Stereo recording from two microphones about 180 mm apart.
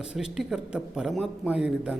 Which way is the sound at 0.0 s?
5° right (ahead or behind).